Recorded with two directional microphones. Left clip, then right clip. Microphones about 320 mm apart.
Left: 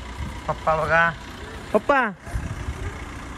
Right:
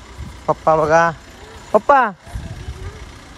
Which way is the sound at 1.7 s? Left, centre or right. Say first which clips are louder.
Right 7 dB; right.